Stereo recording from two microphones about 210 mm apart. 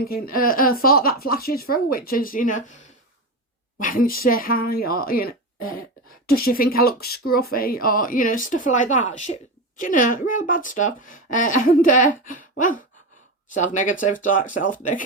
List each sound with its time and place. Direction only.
0.0 s speech: 45° left (ahead or behind)